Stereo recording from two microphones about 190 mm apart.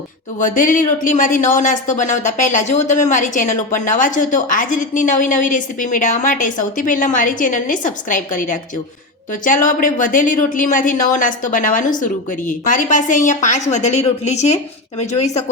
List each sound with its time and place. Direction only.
0.3 s a woman's voice: 45° left (ahead or behind)